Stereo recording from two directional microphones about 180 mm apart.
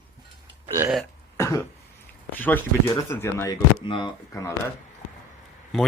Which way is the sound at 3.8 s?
30° left (ahead or behind).